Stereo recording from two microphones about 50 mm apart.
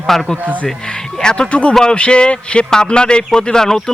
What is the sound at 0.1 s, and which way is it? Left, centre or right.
A man's voice, centre.